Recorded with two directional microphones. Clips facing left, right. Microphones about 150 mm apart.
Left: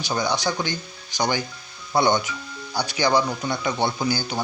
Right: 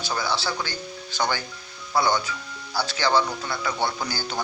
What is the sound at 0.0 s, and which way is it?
Speech, 20° left (ahead or behind).